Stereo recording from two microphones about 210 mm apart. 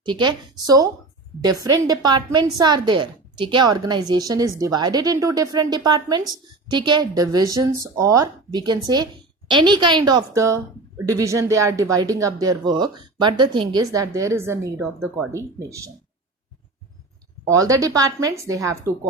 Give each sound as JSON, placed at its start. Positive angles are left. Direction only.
{"t": 0.0, "sound": "a woman's voice", "side_deg": -20}
{"t": 17.5, "sound": "a woman's voice", "side_deg": -15}